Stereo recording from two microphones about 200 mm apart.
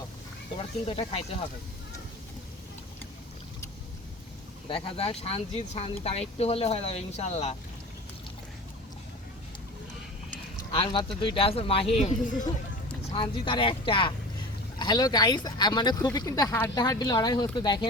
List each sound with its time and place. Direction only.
0.5 s speech: 25° left (ahead or behind)
4.7 s speech: 25° left (ahead or behind)
10.7 s speech: 25° left (ahead or behind)
13.1 s speech: 25° left (ahead or behind)